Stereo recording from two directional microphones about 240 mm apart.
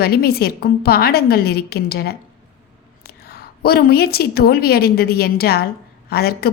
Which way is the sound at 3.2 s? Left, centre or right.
Left.